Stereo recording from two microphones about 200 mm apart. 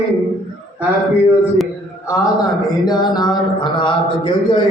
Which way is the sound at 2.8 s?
20° left (ahead or behind).